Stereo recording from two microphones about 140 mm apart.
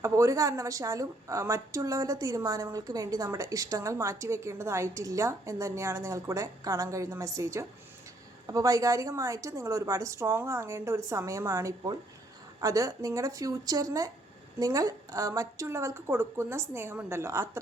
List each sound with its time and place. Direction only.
0.0 s a woman's voice: 20° right (ahead or behind)